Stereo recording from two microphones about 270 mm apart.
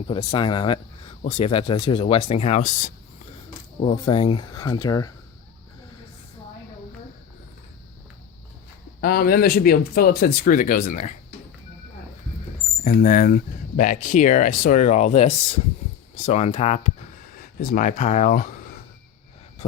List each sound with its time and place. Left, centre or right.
0.1 s speech: centre
9.0 s speech: left
12.8 s speech: left